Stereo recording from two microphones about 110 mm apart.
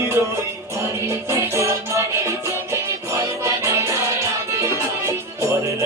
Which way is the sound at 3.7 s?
25° right (ahead or behind).